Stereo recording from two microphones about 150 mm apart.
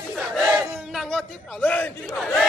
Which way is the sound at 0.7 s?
Centre (ahead or behind).